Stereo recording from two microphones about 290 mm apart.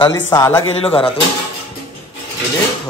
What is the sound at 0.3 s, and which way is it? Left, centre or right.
Speech, centre.